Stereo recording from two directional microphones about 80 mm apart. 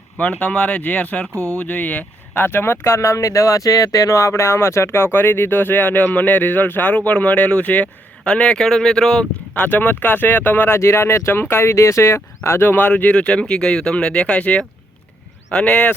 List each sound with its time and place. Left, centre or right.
0.2 s speech: centre
1.3 s speech: right
1.5 s speech: centre
9.6 s speech: left